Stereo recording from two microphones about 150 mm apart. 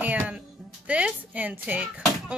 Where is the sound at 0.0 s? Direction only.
10° right (ahead or behind).